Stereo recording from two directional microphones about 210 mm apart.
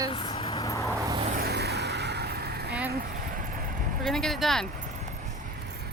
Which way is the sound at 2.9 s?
45° right (ahead or behind).